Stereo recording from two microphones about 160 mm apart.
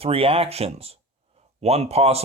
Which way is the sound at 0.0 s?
35° right (ahead or behind).